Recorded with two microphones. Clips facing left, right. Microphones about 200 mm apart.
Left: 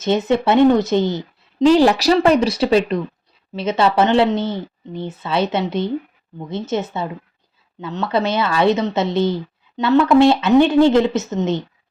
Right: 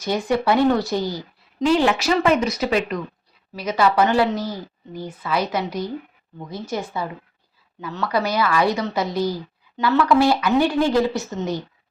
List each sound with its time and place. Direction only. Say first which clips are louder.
0.0 s a woman's voice: left 4 dB; 25° left (ahead or behind)